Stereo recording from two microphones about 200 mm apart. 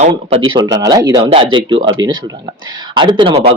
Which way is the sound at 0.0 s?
30° right (ahead or behind).